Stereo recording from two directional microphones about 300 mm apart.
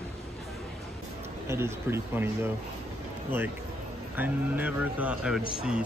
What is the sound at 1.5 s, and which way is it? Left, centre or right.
Speech, centre.